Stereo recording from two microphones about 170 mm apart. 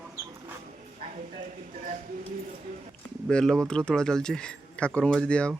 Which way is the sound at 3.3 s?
5° left (ahead or behind).